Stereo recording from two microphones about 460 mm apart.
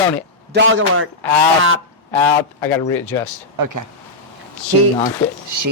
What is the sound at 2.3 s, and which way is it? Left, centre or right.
Speech, centre.